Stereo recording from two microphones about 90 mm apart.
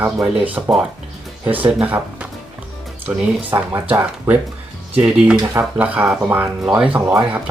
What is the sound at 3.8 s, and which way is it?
Speech, 15° right (ahead or behind).